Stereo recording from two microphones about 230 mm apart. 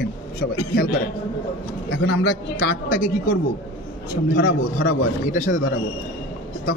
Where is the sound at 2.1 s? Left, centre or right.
Left.